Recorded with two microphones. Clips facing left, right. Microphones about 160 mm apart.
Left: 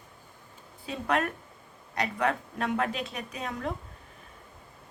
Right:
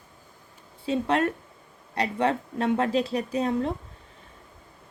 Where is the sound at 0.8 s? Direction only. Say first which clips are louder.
Right 5 dB; 30° right (ahead or behind).